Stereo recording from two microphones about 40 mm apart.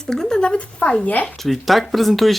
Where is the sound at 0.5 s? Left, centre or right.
Left.